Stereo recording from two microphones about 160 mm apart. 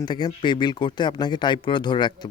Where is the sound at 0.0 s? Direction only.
25° left (ahead or behind).